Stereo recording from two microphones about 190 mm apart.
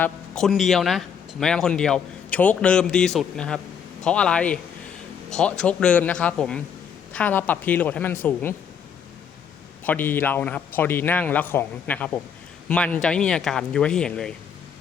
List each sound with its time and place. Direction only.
0.0 s a man's voice: 5° left (ahead or behind)
9.8 s a man's voice: 10° left (ahead or behind)